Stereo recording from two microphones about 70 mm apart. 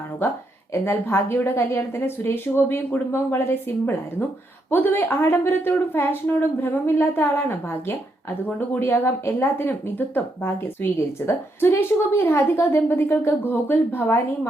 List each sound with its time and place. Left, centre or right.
0.7 s a woman's voice: left